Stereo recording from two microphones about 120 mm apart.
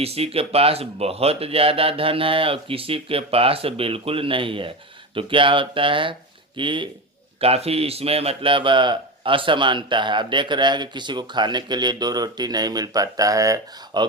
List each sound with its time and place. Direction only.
0.0 s speech: 55° right (ahead or behind)
7.4 s a man's voice: 55° right (ahead or behind); by 14.1 s 35° right (ahead or behind)